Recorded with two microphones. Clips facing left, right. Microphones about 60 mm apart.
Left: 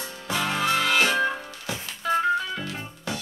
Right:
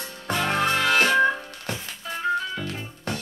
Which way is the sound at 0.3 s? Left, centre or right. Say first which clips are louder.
Right 2 dB; right.